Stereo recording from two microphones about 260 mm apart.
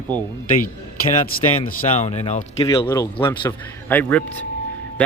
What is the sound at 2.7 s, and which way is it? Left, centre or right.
A man's voice, centre.